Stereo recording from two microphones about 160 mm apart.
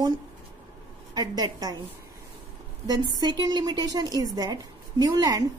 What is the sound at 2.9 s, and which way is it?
A woman's voice, 25° right (ahead or behind).